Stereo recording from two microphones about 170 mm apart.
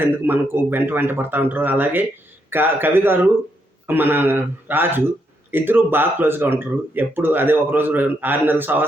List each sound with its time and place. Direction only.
0.0 s speech: 15° right (ahead or behind)